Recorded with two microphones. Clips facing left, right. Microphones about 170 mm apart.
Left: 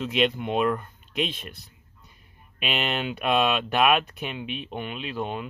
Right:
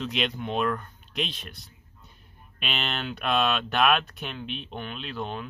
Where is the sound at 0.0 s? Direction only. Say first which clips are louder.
Left 5 dB; 5° left (ahead or behind).